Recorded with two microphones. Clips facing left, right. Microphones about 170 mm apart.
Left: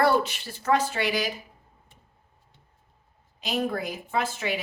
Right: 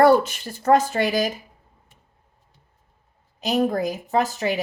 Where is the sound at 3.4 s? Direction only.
40° right (ahead or behind).